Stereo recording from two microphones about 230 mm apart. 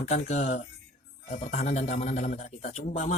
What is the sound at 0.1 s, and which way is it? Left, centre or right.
A man's voice, left.